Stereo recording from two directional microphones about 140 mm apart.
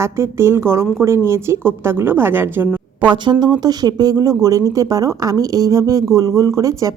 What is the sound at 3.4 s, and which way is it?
A woman's voice, 30° right (ahead or behind).